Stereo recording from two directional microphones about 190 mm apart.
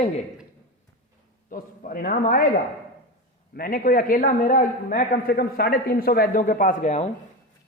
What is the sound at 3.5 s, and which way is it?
A man's voice, 50° left (ahead or behind).